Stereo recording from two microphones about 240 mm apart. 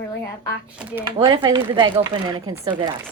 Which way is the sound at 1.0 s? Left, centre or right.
Centre.